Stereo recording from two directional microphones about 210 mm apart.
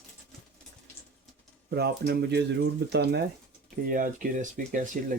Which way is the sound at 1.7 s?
50° right (ahead or behind).